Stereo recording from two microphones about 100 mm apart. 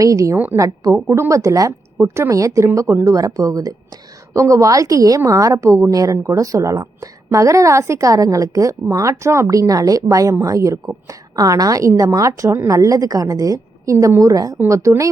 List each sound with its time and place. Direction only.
0.0 s a woman's voice: 35° right (ahead or behind)